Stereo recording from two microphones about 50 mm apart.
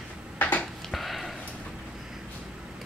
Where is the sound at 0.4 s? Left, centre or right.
Left.